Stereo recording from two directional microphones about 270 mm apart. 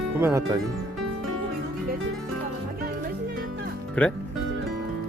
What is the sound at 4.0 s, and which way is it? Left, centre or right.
Speech, centre.